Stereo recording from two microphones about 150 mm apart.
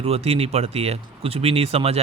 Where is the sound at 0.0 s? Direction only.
40° right (ahead or behind).